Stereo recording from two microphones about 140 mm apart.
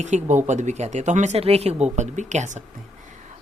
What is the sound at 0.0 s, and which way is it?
Speech, 60° right (ahead or behind).